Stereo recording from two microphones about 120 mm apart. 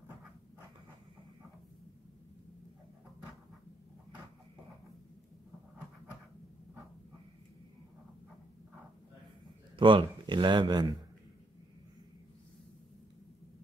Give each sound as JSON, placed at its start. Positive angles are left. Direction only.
{"t": 9.8, "sound": "a man's voice", "side_deg": -40}